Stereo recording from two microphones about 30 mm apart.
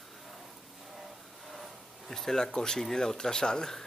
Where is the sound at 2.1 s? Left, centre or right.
Centre.